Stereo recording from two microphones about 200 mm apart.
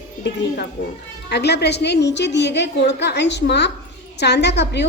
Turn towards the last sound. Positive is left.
turn(degrees=60)  # may be behind; listen again after turning